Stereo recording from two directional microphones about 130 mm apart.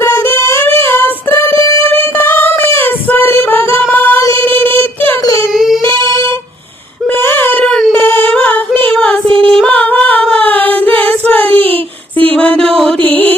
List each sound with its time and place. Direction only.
0.0 s music: 20° left (ahead or behind)
1.9 s female singing: 15° left (ahead or behind)
3.9 s singing: 15° left (ahead or behind)
4.4 s child singing: 15° left (ahead or behind)
5.2 s a sound: 25° left (ahead or behind)
5.5 s singing: 5° right (ahead or behind)
5.8 s music: 25° left (ahead or behind)
7.2 s a sound: 15° left (ahead or behind)
7.9 s female singing: 15° left (ahead or behind)
9.2 s music: 45° right (ahead or behind)
9.5 s singing: 5° left (ahead or behind)
12.3 s a sound: 10° left (ahead or behind)
13.0 s music: 15° left (ahead or behind)